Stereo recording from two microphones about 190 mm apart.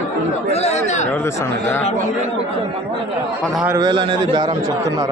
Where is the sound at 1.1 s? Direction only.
10° left (ahead or behind).